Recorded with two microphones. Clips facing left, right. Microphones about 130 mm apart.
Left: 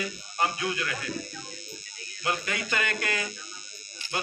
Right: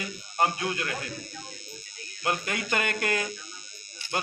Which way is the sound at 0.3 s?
50° right (ahead or behind).